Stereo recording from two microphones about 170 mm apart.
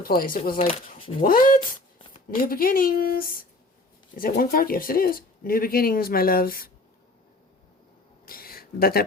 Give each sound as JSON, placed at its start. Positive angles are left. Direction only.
{"t": 0.0, "sound": "speech", "side_deg": 60}
{"t": 0.6, "sound": "speech", "side_deg": 35}
{"t": 1.2, "sound": "speech", "side_deg": 55}
{"t": 8.2, "sound": "a sound", "side_deg": 60}